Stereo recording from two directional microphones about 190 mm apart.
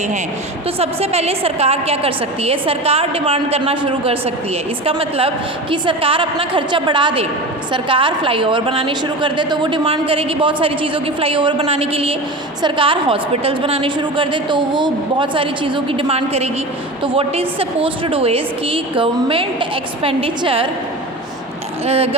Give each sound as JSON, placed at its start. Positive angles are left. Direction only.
{"t": 0.8, "sound": "a woman's voice", "side_deg": -35}
{"t": 21.8, "sound": "a woman's voice", "side_deg": -30}